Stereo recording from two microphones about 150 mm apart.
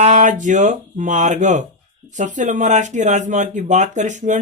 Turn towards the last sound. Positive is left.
turn(degrees=-55)  # may be behind; listen again after turning